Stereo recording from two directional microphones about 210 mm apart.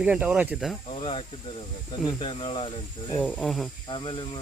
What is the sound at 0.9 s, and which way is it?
Speech, 25° left (ahead or behind).